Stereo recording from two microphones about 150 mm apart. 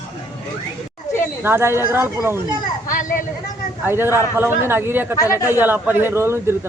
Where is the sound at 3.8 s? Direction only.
15° right (ahead or behind).